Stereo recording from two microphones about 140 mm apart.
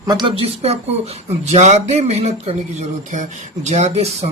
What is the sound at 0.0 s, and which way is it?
Speech, 30° right (ahead or behind).